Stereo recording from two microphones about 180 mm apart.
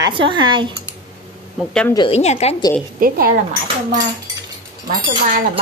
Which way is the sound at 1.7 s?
5° left (ahead or behind).